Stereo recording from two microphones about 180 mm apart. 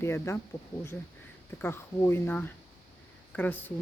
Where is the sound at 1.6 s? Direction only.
15° left (ahead or behind).